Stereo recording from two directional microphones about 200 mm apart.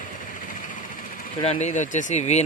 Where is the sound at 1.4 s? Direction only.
30° left (ahead or behind).